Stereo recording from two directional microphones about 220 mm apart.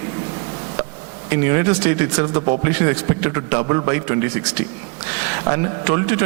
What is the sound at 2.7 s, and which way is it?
A man's voice, 15° right (ahead or behind).